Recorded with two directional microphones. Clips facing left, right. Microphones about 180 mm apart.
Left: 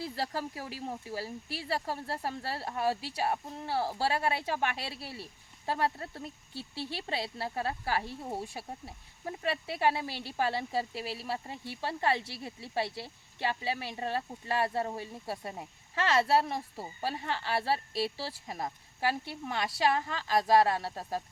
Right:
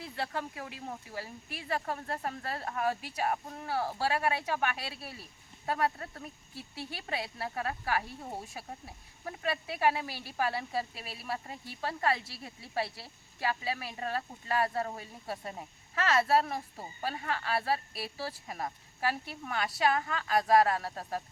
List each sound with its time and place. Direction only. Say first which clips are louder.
0.0 s speech: left 2 dB; 35° left (ahead or behind)